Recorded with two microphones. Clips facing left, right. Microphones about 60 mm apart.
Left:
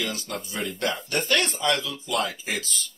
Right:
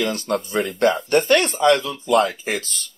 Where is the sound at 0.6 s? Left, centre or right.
Right.